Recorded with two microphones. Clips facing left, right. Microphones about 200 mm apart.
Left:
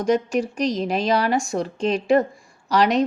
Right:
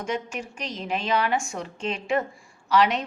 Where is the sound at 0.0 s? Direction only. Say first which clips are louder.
Left 10 dB; 40° left (ahead or behind).